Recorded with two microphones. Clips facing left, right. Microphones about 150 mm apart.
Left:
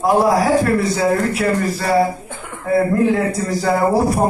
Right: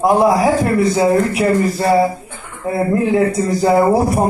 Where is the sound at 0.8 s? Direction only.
20° right (ahead or behind).